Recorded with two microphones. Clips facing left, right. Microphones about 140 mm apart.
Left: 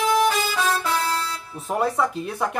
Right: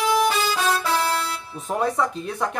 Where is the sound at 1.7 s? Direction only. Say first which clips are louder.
Even; 5° left (ahead or behind).